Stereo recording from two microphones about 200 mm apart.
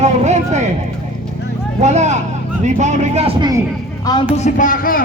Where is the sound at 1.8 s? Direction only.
35° right (ahead or behind).